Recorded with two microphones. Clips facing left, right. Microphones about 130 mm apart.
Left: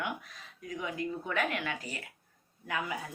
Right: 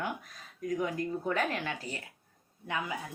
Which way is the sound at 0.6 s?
45° right (ahead or behind).